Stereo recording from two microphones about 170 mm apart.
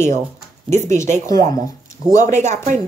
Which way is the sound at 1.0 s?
45° right (ahead or behind).